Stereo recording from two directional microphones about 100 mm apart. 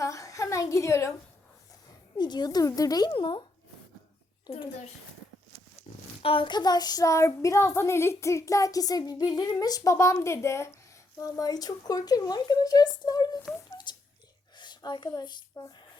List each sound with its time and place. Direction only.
0.0 s a sound: 35° left (ahead or behind)
2.1 s child singing: 45° left (ahead or behind)
3.1 s speech: 55° left (ahead or behind)
5.9 s a sound: 90° left
6.2 s child singing: 60° left (ahead or behind); by 13.2 s 40° left (ahead or behind)
13.5 s speech: 5° right (ahead or behind)
13.9 s whispering: 50° left (ahead or behind)
14.5 s a woman's voice: 50° left (ahead or behind)